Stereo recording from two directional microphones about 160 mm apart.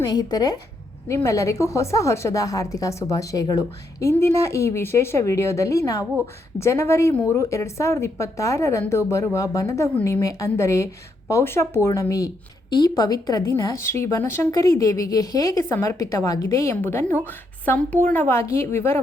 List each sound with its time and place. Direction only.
0.0 s a woman's voice: 25° left (ahead or behind)